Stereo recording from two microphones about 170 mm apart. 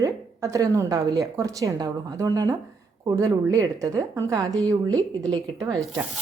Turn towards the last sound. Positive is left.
turn(degrees=-20)  # may be behind; listen again after turning